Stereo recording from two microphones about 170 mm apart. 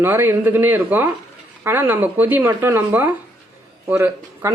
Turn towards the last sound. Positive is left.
turn(degrees=-15)  # may be behind; listen again after turning